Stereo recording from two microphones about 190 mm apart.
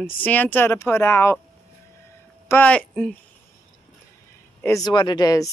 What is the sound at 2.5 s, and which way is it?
Speech, 5° left (ahead or behind).